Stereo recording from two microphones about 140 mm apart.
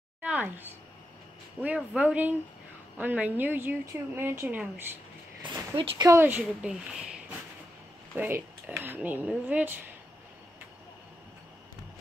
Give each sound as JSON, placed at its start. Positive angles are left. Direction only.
{"t": 0.2, "sound": "a sound", "side_deg": -10}
{"t": 1.6, "sound": "a woman's voice", "side_deg": -10}
{"t": 5.4, "sound": "speech", "side_deg": -35}
{"t": 6.1, "sound": "a woman's voice", "side_deg": -10}